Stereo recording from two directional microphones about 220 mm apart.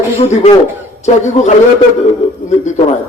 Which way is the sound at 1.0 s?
30° left (ahead or behind).